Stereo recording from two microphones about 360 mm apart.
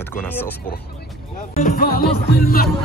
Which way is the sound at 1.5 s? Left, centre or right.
Left.